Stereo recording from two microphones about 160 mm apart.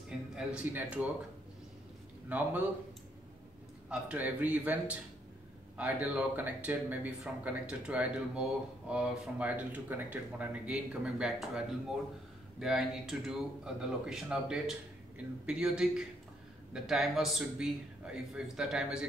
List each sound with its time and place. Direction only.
0.4 s speech: 10° right (ahead or behind)
2.2 s speech: 10° right (ahead or behind)
3.9 s a man's voice: 10° right (ahead or behind)